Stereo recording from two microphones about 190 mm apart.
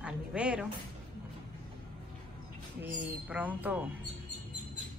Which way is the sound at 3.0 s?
10° right (ahead or behind).